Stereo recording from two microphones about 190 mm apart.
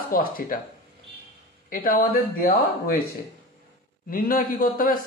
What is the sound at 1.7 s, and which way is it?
Speech, 50° left (ahead or behind).